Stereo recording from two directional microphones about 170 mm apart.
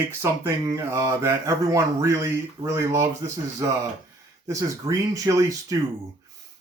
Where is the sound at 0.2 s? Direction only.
15° right (ahead or behind).